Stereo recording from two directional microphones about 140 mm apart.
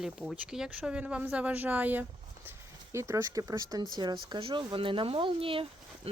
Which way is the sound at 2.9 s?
20° right (ahead or behind).